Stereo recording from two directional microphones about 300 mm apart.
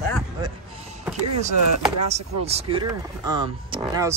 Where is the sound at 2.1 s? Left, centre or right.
Right.